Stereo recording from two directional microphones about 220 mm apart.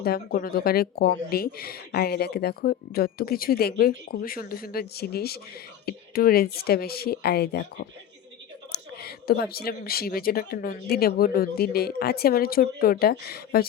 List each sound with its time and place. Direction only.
0.0 s speech: 45° left (ahead or behind)